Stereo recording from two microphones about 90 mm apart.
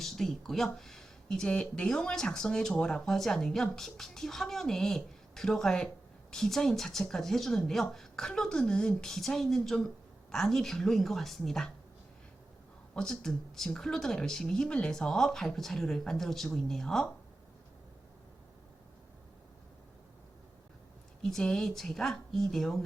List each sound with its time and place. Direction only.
0.0 s speech: 5° left (ahead or behind)
12.9 s speech: 5° left (ahead or behind)
21.2 s speech: 5° left (ahead or behind)